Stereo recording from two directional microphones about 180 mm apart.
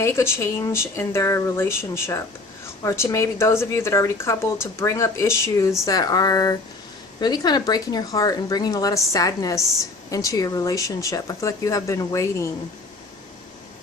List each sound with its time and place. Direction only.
0.0 s speech: 15° left (ahead or behind)